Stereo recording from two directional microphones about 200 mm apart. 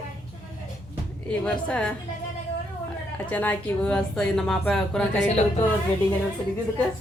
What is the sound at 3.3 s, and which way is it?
Speech, 10° left (ahead or behind).